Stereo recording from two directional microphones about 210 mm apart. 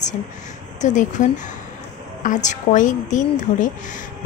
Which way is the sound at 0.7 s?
35° left (ahead or behind).